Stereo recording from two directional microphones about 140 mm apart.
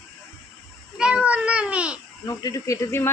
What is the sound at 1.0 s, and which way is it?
Babbling, 5° right (ahead or behind).